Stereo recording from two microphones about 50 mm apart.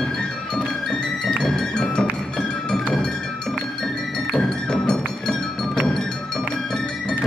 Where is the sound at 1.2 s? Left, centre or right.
Centre.